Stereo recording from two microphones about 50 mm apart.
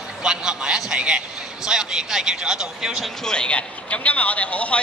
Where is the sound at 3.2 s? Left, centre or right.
Centre.